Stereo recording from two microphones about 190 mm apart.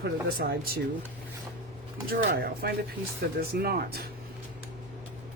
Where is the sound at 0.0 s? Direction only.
50° right (ahead or behind).